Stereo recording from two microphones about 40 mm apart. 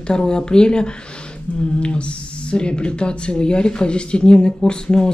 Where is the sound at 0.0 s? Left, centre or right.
Centre.